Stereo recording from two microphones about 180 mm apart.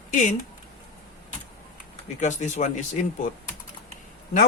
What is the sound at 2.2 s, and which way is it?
Speech, 40° left (ahead or behind).